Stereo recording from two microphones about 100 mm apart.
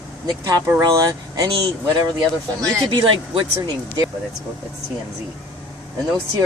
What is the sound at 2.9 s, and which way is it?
Speech, 60° right (ahead or behind).